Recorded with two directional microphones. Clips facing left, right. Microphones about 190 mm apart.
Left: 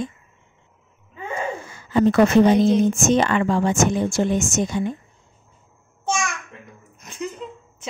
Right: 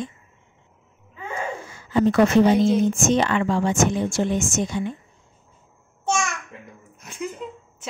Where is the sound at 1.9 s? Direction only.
50° left (ahead or behind).